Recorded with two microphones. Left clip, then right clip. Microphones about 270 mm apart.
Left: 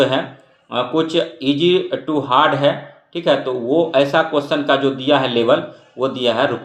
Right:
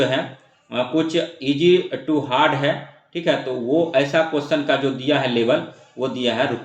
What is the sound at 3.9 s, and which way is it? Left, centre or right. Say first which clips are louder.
Speech: left 3 dB; centre.